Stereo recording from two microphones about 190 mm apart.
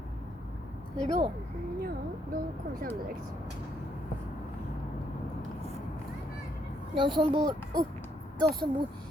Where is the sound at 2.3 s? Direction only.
50° right (ahead or behind).